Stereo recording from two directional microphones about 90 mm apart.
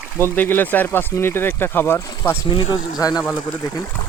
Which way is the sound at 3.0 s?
45° left (ahead or behind).